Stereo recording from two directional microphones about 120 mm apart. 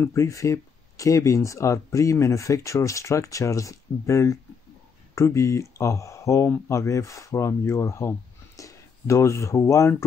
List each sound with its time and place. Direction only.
0.0 s speech: 25° left (ahead or behind)